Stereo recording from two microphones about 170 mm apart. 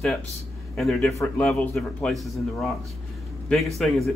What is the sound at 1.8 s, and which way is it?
Speech, 5° left (ahead or behind).